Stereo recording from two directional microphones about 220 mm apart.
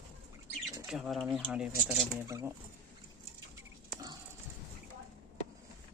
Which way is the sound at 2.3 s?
15° right (ahead or behind).